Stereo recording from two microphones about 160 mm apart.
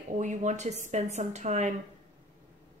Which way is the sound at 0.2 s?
50° right (ahead or behind).